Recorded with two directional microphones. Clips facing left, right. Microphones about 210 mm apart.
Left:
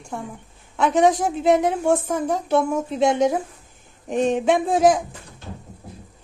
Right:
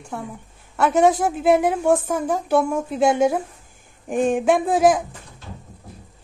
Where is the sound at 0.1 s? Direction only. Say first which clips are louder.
Even; 5° right (ahead or behind).